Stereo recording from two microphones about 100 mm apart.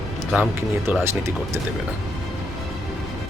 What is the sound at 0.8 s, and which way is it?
Speech, 25° right (ahead or behind).